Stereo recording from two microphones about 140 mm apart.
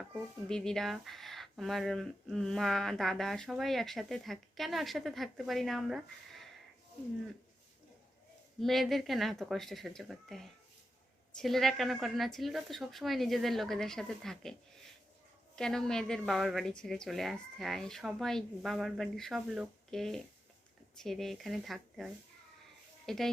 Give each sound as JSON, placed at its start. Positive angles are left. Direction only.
{"t": 0.4, "sound": "speech", "side_deg": 5}
{"t": 8.6, "sound": "speech", "side_deg": 0}
{"t": 15.5, "sound": "speech", "side_deg": 5}